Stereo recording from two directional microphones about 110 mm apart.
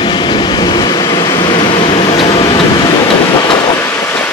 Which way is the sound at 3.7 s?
20° left (ahead or behind).